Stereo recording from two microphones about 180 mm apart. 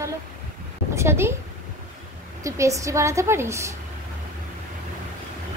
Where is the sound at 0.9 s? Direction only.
15° right (ahead or behind).